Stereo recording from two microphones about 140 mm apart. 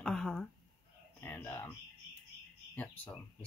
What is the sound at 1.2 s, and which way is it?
Speech, 15° left (ahead or behind).